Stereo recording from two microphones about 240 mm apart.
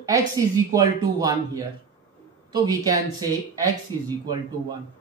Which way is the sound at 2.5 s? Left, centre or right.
Centre.